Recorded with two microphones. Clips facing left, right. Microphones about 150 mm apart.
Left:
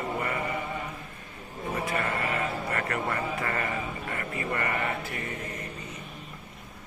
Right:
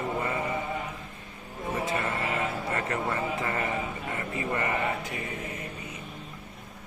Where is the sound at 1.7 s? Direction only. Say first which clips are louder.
Even; 20° right (ahead or behind).